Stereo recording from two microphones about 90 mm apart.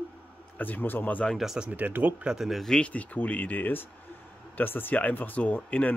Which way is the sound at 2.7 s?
15° left (ahead or behind).